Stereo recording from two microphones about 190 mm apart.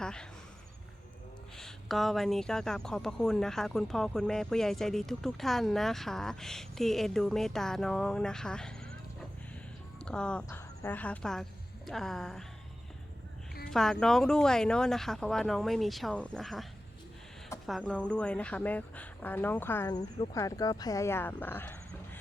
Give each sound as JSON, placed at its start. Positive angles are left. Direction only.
{"t": 0.0, "sound": "speech", "side_deg": 5}
{"t": 1.5, "sound": "speech", "side_deg": 0}
{"t": 10.1, "sound": "speech", "side_deg": 5}
{"t": 13.7, "sound": "speech", "side_deg": 0}
{"t": 17.7, "sound": "speech", "side_deg": 0}